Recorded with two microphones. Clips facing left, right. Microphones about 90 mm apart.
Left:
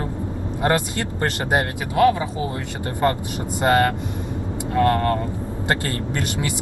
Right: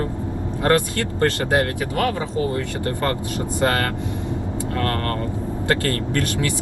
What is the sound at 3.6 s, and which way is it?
Speech, 20° left (ahead or behind).